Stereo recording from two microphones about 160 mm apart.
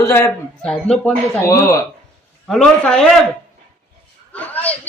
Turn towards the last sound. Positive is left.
turn(degrees=10)  # may be behind; listen again after turning